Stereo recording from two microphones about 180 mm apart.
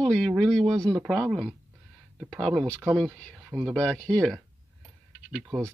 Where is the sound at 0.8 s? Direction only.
20° right (ahead or behind).